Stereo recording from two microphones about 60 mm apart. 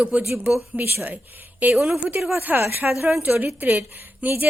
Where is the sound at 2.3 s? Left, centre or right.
Right.